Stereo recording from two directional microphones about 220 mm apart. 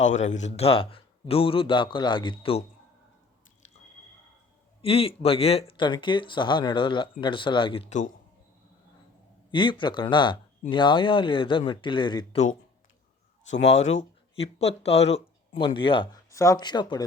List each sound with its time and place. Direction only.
0.5 s speech: 25° left (ahead or behind)
4.8 s speech: 25° left (ahead or behind)
9.5 s speech: 20° left (ahead or behind)
13.7 s speech: 30° left (ahead or behind)